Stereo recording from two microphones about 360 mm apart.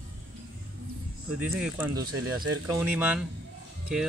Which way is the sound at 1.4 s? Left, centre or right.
Centre.